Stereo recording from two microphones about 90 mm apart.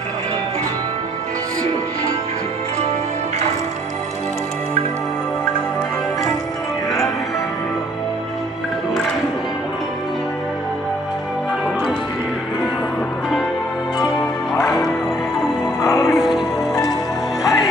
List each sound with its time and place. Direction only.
14.5 s music: centre (ahead or behind)
15.8 s music: 35° left (ahead or behind)
16.2 s music: centre (ahead or behind)
17.4 s music: 40° left (ahead or behind)